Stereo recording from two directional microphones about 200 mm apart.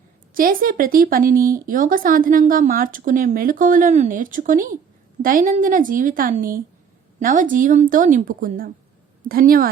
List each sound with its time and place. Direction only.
0.3 s a woman's voice: 45° right (ahead or behind)